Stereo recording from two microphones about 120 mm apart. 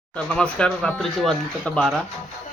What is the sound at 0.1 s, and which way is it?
A man's voice, 10° left (ahead or behind).